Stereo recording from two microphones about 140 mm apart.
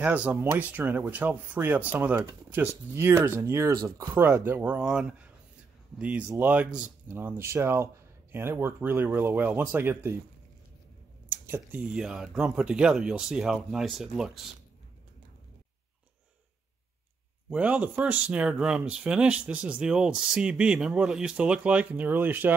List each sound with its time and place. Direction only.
0.0 s speech: 10° right (ahead or behind)
11.2 s speech: 15° right (ahead or behind)
17.5 s speech: 10° right (ahead or behind)